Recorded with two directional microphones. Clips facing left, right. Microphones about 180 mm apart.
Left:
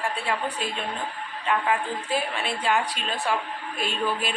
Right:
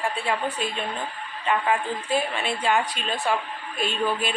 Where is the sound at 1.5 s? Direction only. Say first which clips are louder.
Right 1 dB; centre (ahead or behind).